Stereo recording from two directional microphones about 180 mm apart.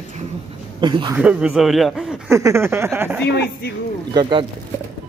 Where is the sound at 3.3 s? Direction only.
65° left (ahead or behind).